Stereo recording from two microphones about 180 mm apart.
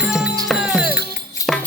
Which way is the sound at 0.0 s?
Centre (ahead or behind).